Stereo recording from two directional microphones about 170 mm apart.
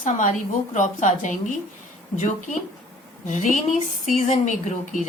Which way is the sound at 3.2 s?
45° left (ahead or behind).